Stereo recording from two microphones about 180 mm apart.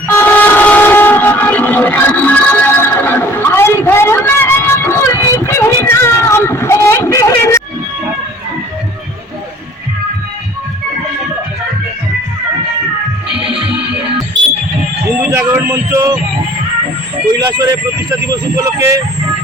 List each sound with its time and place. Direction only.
0.1 s train: 10° left (ahead or behind)
15.0 s music: 10° right (ahead or behind)
15.7 s speech: 15° right (ahead or behind)
17.4 s speech: 15° right (ahead or behind)